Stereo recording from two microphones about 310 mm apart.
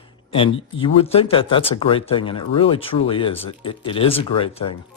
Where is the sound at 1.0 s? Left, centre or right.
Centre.